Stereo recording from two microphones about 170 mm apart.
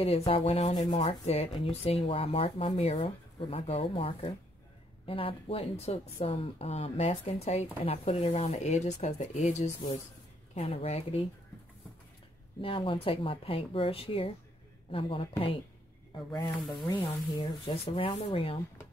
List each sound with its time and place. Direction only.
0.3 s speech: 35° left (ahead or behind)
12.6 s speech: 30° left (ahead or behind)
16.4 s speech: centre (ahead or behind)
16.8 s speech: 25° left (ahead or behind)